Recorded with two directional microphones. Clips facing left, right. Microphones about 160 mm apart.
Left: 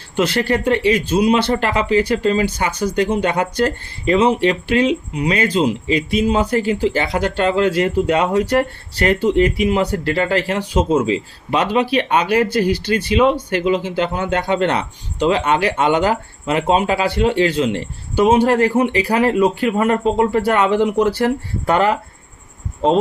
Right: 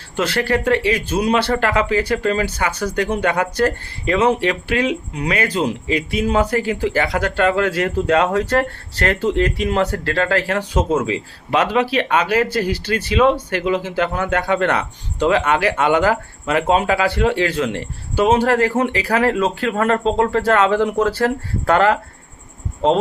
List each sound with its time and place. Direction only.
0.2 s speech: 20° left (ahead or behind)